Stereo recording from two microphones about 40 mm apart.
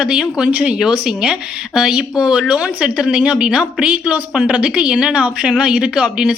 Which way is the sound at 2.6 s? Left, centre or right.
Right.